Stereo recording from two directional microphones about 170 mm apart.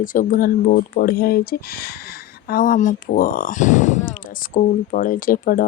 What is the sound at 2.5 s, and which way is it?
Speech, 55° left (ahead or behind).